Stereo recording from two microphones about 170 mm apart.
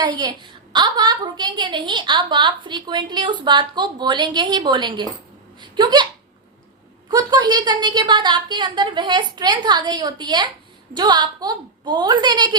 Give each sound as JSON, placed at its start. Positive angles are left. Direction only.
{"t": 0.0, "sound": "a woman's voice", "side_deg": -25}
{"t": 7.1, "sound": "a woman's voice", "side_deg": -25}